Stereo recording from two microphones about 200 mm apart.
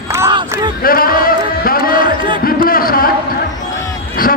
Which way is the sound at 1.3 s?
45° left (ahead or behind).